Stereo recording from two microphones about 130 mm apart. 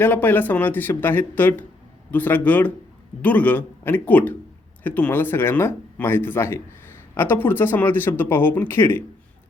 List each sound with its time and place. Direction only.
0.0 s speech: 15° left (ahead or behind)